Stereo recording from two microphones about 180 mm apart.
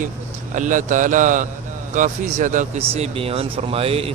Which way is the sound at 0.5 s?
45° right (ahead or behind).